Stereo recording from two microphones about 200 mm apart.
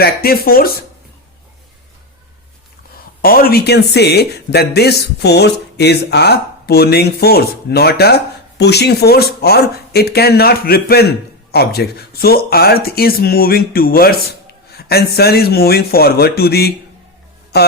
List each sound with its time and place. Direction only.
0.0 s speech: 50° left (ahead or behind)
3.2 s speech: 45° left (ahead or behind)